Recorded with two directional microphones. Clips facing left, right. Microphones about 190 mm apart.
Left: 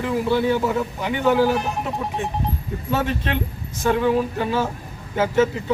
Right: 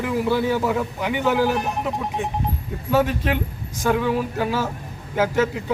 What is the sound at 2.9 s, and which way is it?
Speech, 10° right (ahead or behind).